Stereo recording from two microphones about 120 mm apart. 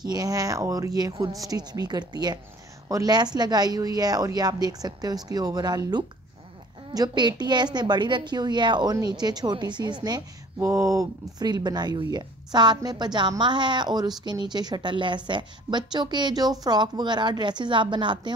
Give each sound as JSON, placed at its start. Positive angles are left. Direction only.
{"t": 0.0, "sound": "speech", "side_deg": -30}